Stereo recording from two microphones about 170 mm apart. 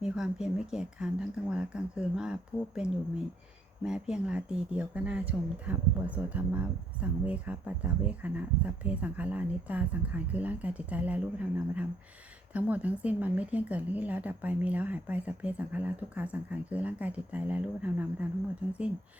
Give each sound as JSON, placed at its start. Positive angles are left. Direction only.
{"t": 0.0, "sound": "speech", "side_deg": -5}
{"t": 12.5, "sound": "speech", "side_deg": -10}